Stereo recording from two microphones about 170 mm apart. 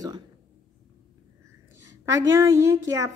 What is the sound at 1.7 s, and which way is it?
A woman's voice, 15° right (ahead or behind).